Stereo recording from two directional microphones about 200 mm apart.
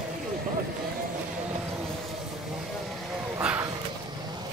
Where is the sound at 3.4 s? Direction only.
5° right (ahead or behind).